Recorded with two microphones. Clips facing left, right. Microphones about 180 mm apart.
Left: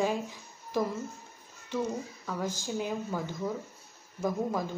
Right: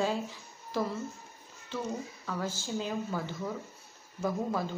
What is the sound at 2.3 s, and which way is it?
Speech, 15° left (ahead or behind).